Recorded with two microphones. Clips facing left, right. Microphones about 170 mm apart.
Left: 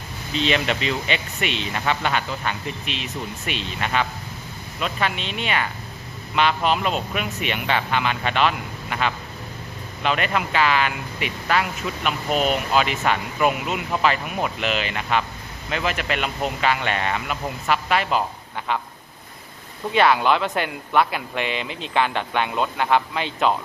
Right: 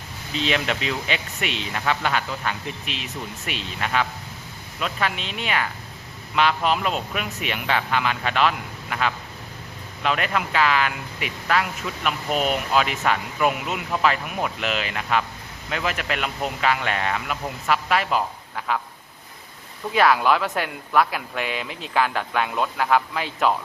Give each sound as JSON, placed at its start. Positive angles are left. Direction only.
{"t": 0.3, "sound": "speech", "side_deg": -5}
{"t": 19.9, "sound": "speech", "side_deg": 0}